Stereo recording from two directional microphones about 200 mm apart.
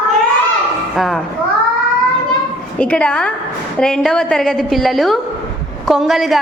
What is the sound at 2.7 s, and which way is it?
A woman's voice, 5° left (ahead or behind).